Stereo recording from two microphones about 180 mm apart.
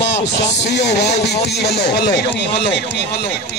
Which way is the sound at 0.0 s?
70° left (ahead or behind).